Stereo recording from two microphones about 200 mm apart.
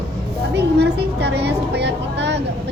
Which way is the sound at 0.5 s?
55° right (ahead or behind).